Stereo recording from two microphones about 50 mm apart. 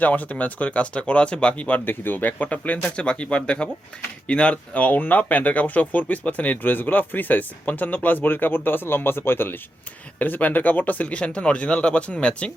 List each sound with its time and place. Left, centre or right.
0.0 s speech: left
1.8 s speech: left
10.2 s speech: left